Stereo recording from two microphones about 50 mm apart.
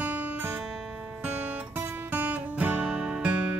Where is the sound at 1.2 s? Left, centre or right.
Right.